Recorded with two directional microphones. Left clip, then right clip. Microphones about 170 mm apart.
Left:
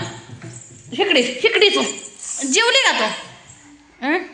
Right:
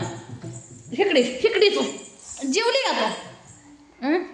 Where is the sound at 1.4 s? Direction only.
25° left (ahead or behind).